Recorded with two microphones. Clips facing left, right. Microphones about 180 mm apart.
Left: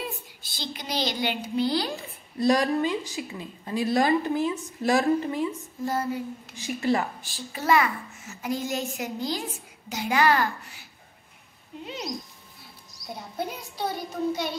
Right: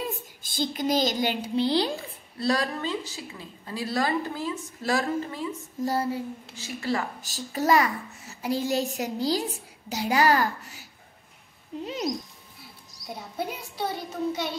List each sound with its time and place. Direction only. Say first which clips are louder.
0.4 s speech: right 13 dB; 50° right (ahead or behind)
1.6 s a woman's voice: right 2 dB; 25° right (ahead or behind)
2.3 s a woman's voice: left 5 dB; 15° left (ahead or behind)
5.9 s a child's voice: right 1 dB; 35° right (ahead or behind)
6.5 s a woman's voice: left 4 dB; 20° left (ahead or behind)
7.2 s a child's voice: right 6 dB; 40° right (ahead or behind)
13.1 s a child's voice: even; 5° right (ahead or behind)